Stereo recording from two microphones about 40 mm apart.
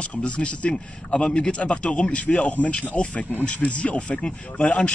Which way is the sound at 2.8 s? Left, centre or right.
Left.